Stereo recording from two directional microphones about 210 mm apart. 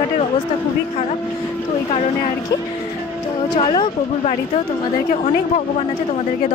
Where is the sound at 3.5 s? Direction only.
25° left (ahead or behind).